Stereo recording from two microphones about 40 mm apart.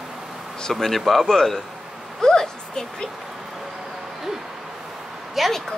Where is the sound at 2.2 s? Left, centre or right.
Centre.